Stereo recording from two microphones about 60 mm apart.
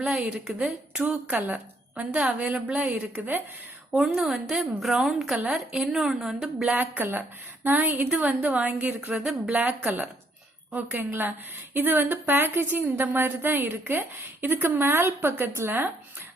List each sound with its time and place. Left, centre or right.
0.0 s a woman's voice: centre
1.3 s a woman's voice: right
3.2 s a woman's voice: right
3.9 s a woman's voice: centre
6.7 s a woman's voice: right
10.8 s a woman's voice: right